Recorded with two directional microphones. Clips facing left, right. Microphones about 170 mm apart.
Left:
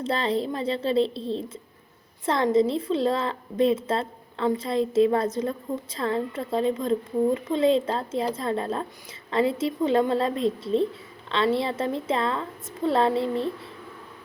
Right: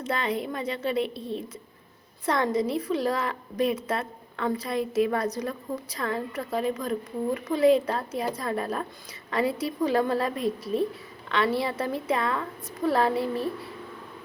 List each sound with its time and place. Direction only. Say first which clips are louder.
0.0 s a woman's voice: left 3 dB; 30° left (ahead or behind)